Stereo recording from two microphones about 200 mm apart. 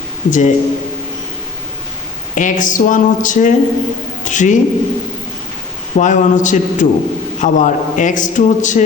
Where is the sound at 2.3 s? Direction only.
40° left (ahead or behind).